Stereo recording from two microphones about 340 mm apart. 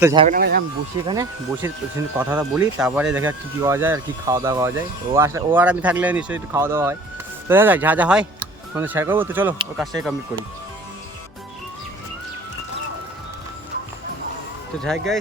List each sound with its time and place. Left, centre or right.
0.0 s speech: centre
0.3 s speech: right
1.0 s speech: centre
14.8 s speech: centre